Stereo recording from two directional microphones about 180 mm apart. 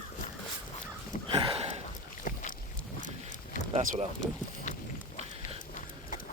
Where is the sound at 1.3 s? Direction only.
30° right (ahead or behind).